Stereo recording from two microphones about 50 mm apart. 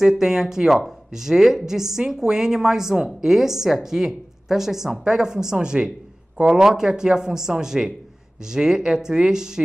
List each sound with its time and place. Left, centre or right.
0.0 s speech: centre